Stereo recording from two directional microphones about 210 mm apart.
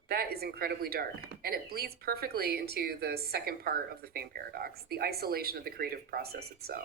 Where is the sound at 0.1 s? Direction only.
50° right (ahead or behind).